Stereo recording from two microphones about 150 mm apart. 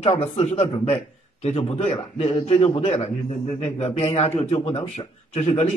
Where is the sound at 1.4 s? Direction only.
45° left (ahead or behind).